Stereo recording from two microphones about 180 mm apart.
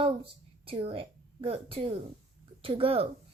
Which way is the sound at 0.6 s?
30° right (ahead or behind).